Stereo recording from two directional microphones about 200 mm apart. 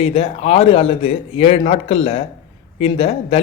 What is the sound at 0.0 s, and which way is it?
A man's voice, 30° left (ahead or behind).